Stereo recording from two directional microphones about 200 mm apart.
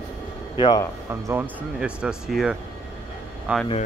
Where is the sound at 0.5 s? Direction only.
25° left (ahead or behind).